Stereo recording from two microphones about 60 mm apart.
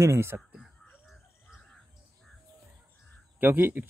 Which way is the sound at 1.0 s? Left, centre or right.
Centre.